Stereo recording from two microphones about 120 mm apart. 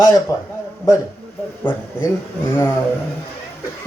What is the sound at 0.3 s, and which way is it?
Speech, 30° left (ahead or behind).